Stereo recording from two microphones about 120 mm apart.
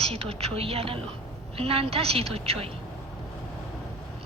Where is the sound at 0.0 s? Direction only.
55° right (ahead or behind).